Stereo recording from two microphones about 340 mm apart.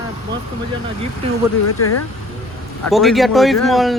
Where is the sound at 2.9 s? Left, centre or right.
Centre.